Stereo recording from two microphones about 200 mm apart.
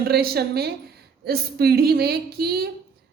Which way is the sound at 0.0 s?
50° right (ahead or behind).